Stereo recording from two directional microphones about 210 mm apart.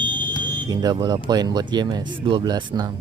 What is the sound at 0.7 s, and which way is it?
Speech, 20° right (ahead or behind).